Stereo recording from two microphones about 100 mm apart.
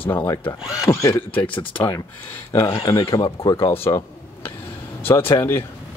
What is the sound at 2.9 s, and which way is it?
Speech, 60° left (ahead or behind).